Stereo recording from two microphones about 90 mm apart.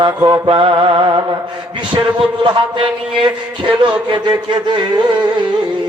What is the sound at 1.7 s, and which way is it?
A man's voice, 65° right (ahead or behind).